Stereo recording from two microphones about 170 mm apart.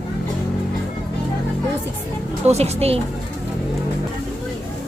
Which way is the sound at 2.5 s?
40° right (ahead or behind).